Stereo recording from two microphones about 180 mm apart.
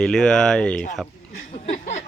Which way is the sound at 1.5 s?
40° left (ahead or behind).